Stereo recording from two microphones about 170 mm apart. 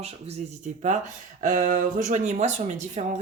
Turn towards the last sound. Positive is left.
turn(degrees=-45)  # may be behind; listen again after turning